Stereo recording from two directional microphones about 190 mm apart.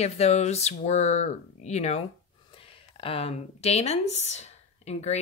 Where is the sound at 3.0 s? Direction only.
30° left (ahead or behind).